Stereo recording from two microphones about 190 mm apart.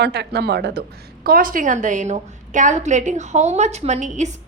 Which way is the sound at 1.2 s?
50° right (ahead or behind).